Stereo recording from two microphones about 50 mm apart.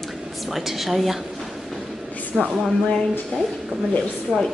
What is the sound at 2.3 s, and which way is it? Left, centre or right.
Speech, centre.